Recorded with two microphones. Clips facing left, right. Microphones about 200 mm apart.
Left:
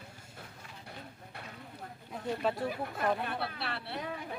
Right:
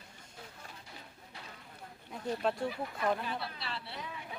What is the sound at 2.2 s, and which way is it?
Speech, centre (ahead or behind).